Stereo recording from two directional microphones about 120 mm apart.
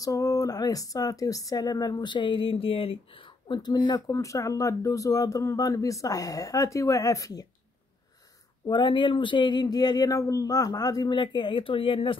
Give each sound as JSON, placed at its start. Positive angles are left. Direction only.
{"t": 0.0, "sound": "speech", "side_deg": 30}
{"t": 8.6, "sound": "speech", "side_deg": 40}